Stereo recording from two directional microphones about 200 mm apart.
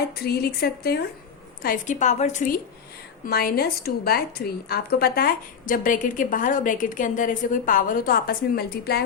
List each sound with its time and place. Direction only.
0.2 s a woman's voice: 50° left (ahead or behind)
1.6 s a woman's voice: 40° left (ahead or behind)
3.2 s a woman's voice: 50° left (ahead or behind)